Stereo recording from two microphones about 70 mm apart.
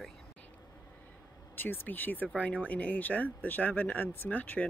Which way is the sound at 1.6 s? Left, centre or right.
Left.